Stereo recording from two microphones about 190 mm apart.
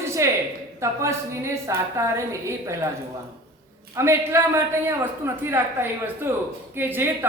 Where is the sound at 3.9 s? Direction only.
15° right (ahead or behind).